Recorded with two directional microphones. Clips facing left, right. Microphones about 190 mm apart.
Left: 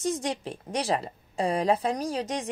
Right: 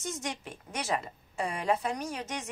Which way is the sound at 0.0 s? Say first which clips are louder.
Left 8 dB; 35° left (ahead or behind).